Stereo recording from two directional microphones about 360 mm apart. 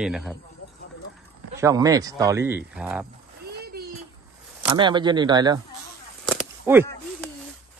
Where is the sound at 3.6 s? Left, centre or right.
Right.